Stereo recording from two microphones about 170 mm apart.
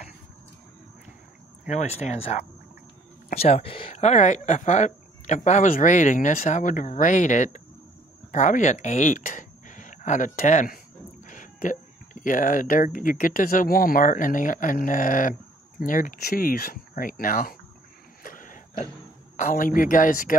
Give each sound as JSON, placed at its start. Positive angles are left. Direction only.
{"t": 1.7, "sound": "speech", "side_deg": 40}
{"t": 18.2, "sound": "a sound", "side_deg": 55}
{"t": 19.3, "sound": "speech", "side_deg": 50}